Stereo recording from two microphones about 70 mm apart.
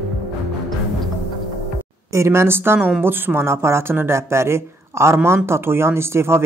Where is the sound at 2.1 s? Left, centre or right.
Right.